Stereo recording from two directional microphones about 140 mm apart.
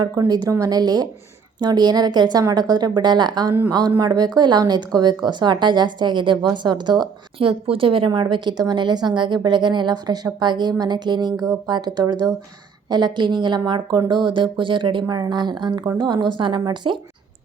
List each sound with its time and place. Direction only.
0.0 s a woman's voice: 25° right (ahead or behind)